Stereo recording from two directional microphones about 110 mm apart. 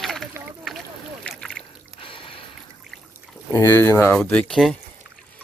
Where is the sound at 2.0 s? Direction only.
55° left (ahead or behind).